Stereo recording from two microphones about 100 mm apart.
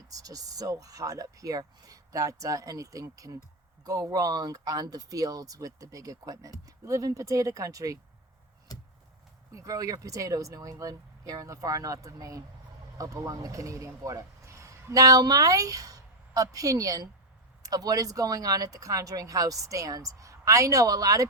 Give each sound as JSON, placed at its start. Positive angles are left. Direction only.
{"t": 0.1, "sound": "speech", "side_deg": -35}
{"t": 9.5, "sound": "speech", "side_deg": -35}